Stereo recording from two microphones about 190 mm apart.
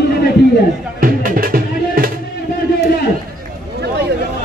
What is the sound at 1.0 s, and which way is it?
Music, 45° right (ahead or behind).